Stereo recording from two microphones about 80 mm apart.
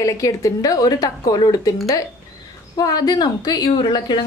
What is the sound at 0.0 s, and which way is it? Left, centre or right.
Speech, left.